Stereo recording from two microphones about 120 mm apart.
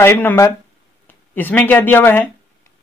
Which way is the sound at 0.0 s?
20° left (ahead or behind).